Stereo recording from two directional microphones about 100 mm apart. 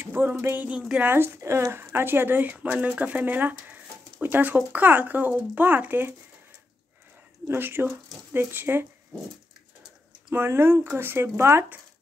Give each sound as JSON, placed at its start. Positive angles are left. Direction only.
{"t": 0.0, "sound": "speech", "side_deg": -20}
{"t": 7.4, "sound": "speech", "side_deg": -20}
{"t": 10.3, "sound": "speech", "side_deg": -25}